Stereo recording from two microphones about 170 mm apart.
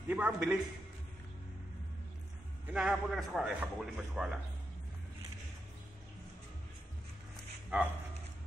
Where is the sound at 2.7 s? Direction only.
5° right (ahead or behind).